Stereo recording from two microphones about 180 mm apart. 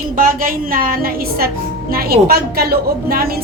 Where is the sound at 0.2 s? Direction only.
50° right (ahead or behind).